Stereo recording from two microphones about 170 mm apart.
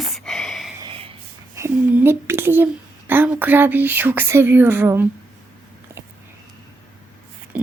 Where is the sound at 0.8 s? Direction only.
30° right (ahead or behind).